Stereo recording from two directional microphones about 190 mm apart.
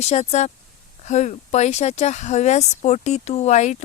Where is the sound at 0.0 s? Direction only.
35° left (ahead or behind).